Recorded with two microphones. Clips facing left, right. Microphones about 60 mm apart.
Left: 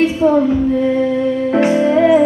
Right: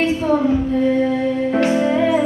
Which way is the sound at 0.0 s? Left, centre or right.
Centre.